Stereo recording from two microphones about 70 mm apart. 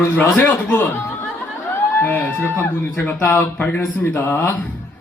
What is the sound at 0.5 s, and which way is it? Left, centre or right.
Speech, left.